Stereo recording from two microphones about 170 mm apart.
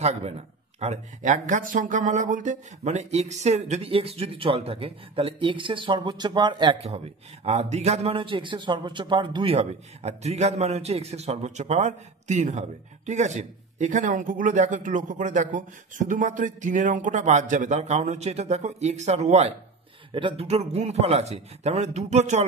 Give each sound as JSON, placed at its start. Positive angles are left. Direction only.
{"t": 0.0, "sound": "a man's voice", "side_deg": -40}